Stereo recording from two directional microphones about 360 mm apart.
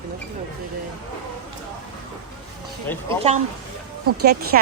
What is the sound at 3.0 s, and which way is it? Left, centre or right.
Speech, centre.